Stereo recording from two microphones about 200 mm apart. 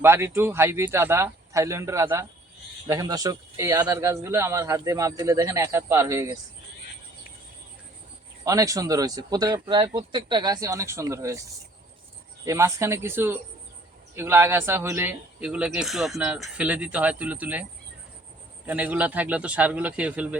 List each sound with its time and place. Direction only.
0.0 s a man's voice: 10° right (ahead or behind)
8.4 s a man's voice: 15° right (ahead or behind)
12.5 s a man's voice: 15° right (ahead or behind)